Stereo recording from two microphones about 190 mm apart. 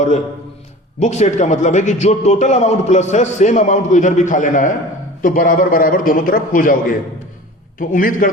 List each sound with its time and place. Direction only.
0.9 s a man's voice: 40° left (ahead or behind)